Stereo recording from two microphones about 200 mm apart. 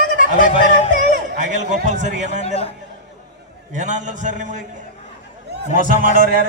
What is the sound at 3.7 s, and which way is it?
Speech, 35° right (ahead or behind).